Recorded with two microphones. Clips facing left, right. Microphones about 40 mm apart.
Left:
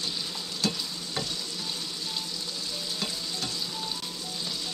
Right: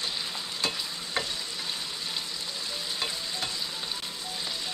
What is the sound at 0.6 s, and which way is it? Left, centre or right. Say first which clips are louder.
Stir: left 2 dB; right.